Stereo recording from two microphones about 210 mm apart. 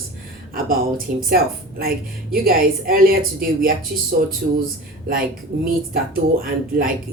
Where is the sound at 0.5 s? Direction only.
45° right (ahead or behind).